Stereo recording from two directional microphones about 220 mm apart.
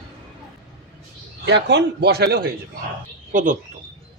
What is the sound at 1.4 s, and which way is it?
Speech, 50° right (ahead or behind).